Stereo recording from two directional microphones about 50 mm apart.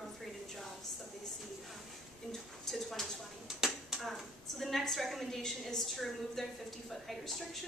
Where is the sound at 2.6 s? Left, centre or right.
Centre.